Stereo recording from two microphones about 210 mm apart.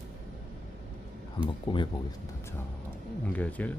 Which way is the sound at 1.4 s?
20° left (ahead or behind).